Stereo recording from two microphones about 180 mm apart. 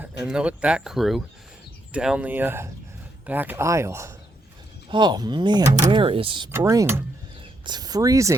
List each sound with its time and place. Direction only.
0.3 s speech: 5° right (ahead or behind); by 6.5 s 30° right (ahead or behind)
6.5 s speech: 15° right (ahead or behind)